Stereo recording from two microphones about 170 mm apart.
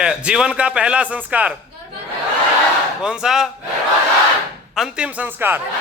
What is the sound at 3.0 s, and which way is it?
Speech, 5° right (ahead or behind).